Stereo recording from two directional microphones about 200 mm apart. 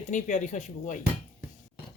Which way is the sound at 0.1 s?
35° left (ahead or behind).